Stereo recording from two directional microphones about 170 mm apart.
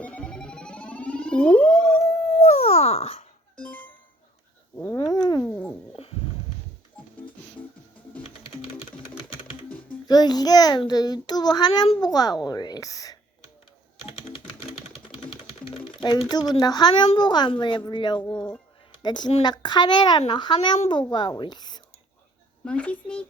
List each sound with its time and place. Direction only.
0.0 s music: 5° left (ahead or behind)
2.4 s music: 40° left (ahead or behind)
3.6 s music: 10° left (ahead or behind)
4.9 s cat: 25° left (ahead or behind)
5.4 s dog: 5° left (ahead or behind)
6.0 s a sound: 35° left (ahead or behind)
9.6 s typing: 10° left (ahead or behind)
10.1 s a child's voice: 25° left (ahead or behind)
14.3 s music: 35° left (ahead or behind)
16.0 s a child's voice: 25° left (ahead or behind)
20.7 s a child's voice: 35° left (ahead or behind)
21.1 s a child's voice: 25° left (ahead or behind)
22.6 s speech: 5° left (ahead or behind)